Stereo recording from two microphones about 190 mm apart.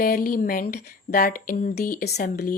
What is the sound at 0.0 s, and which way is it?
Speech, 50° left (ahead or behind).